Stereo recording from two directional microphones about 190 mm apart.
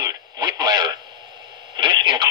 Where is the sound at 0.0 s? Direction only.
20° right (ahead or behind).